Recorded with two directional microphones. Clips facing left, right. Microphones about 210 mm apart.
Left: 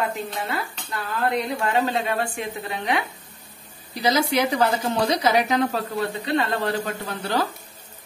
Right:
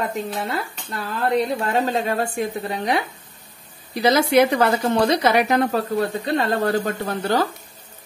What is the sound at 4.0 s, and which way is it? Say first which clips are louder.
A woman's voice: right 5 dB; 60° right (ahead or behind).